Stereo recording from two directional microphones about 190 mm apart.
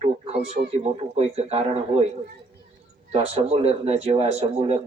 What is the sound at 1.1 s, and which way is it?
Speech, 35° right (ahead or behind).